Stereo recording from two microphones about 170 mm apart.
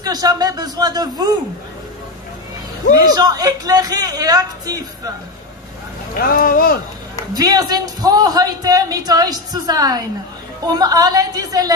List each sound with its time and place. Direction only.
0.0 s speech: 25° right (ahead or behind)
3.0 s speech: 25° right (ahead or behind)
6.1 s speech: 60° left (ahead or behind)
7.3 s speech: 25° right (ahead or behind)